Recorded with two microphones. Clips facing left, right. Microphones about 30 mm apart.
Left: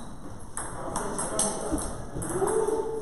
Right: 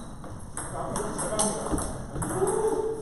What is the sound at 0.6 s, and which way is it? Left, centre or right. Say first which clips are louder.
Ping: right 1 dB; centre.